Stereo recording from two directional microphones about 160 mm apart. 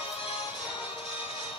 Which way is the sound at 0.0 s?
30° left (ahead or behind).